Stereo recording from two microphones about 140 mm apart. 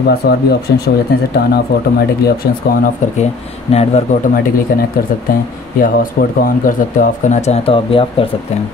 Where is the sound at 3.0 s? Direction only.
60° left (ahead or behind).